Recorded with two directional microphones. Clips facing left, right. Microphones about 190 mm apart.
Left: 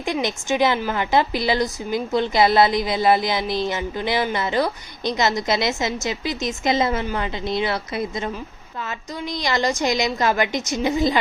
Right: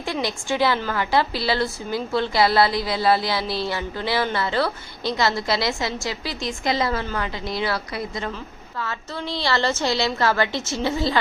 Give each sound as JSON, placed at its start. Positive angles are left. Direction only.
{"t": 0.0, "sound": "a woman's voice", "side_deg": 20}